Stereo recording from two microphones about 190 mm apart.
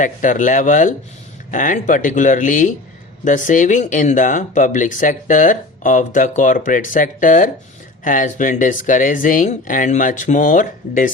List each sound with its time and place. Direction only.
0.0 s speech: 40° left (ahead or behind)